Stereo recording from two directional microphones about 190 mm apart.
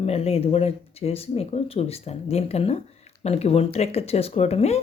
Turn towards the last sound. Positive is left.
turn(degrees=35)  # may be behind; listen again after turning